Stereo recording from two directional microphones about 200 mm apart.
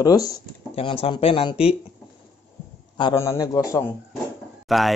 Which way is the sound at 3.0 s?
15° left (ahead or behind).